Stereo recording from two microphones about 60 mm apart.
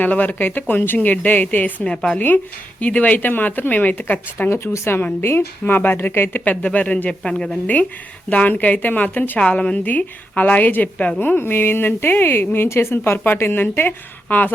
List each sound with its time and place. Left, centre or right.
0.0 s a woman's voice: left
1.9 s a man's voice: centre
2.1 s a woman's voice: left
4.4 s a woman's voice: left; by 7.6 s centre
8.3 s a woman's voice: left
9.4 s a man's voice: centre